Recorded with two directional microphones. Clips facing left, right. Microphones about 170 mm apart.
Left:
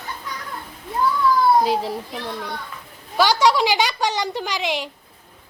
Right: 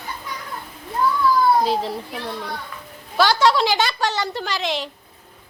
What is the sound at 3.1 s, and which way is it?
Speech, 15° left (ahead or behind).